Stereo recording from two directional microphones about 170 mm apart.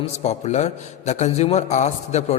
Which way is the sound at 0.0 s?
40° left (ahead or behind).